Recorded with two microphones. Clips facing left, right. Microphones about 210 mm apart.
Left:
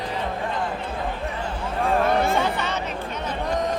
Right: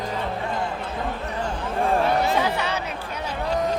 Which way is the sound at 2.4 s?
10° right (ahead or behind).